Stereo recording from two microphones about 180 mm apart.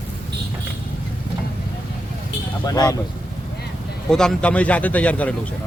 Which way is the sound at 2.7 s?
20° left (ahead or behind).